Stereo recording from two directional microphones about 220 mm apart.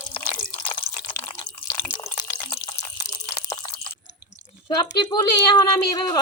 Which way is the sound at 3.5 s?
20° left (ahead or behind).